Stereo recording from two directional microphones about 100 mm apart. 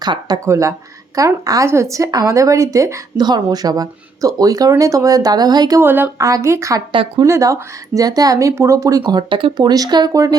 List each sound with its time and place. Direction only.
0.0 s speech: 45° right (ahead or behind)
0.4 s speech: 30° right (ahead or behind)
3.2 s speech: 45° right (ahead or behind)
5.8 s speech: 20° right (ahead or behind)
6.1 s speech: 35° right (ahead or behind)